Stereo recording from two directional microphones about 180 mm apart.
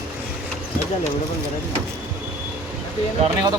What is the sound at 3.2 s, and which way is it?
Speech, 25° right (ahead or behind).